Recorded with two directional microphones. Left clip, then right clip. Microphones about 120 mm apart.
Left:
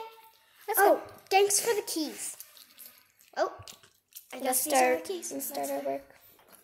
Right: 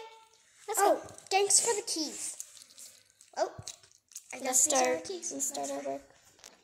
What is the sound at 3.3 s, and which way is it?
Dog, 25° left (ahead or behind).